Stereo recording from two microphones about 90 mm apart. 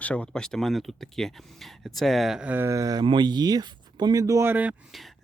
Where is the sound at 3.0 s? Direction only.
55° right (ahead or behind); by 4.4 s 40° right (ahead or behind).